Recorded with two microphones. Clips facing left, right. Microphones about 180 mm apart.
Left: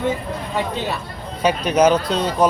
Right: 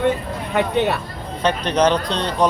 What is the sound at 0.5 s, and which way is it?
Speech, 65° right (ahead or behind).